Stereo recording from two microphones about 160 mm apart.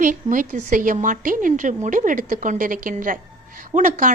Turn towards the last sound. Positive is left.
turn(degrees=-55)  # may be behind; listen again after turning